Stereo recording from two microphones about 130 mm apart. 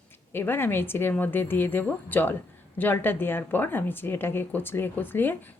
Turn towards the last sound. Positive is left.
turn(degrees=15)  # may be behind; listen again after turning